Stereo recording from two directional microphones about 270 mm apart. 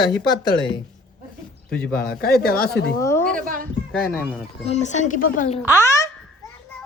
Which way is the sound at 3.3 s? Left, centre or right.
Right.